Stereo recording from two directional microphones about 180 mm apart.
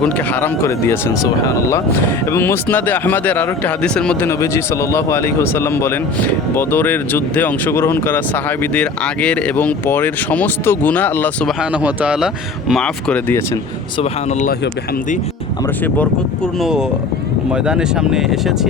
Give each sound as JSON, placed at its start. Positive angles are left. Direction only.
{"t": 0.0, "sound": "speech", "side_deg": 10}
{"t": 11.7, "sound": "speech", "side_deg": -5}
{"t": 14.0, "sound": "speech", "side_deg": 40}
{"t": 16.6, "sound": "speech", "side_deg": -5}